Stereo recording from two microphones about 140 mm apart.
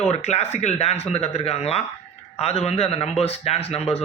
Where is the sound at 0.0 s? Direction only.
50° left (ahead or behind).